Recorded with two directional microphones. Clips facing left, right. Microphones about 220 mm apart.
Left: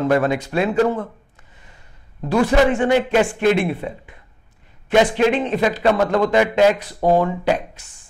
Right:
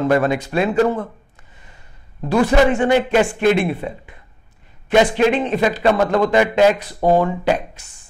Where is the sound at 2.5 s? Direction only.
15° right (ahead or behind).